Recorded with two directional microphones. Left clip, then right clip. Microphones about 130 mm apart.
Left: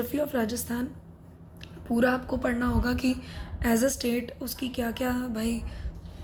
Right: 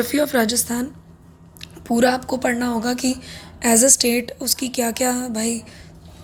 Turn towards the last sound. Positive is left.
turn(degrees=-25)  # may be behind; listen again after turning